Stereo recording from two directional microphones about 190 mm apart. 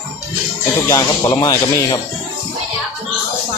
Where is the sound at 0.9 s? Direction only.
20° left (ahead or behind).